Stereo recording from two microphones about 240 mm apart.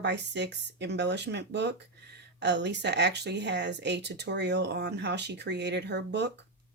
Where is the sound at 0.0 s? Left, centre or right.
Right.